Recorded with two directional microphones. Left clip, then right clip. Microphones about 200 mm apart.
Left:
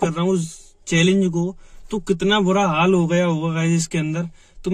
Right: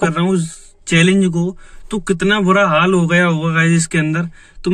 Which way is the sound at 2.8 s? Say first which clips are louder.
Right 3 dB; 35° right (ahead or behind).